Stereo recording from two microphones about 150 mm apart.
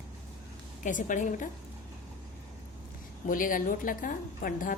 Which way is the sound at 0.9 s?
60° left (ahead or behind).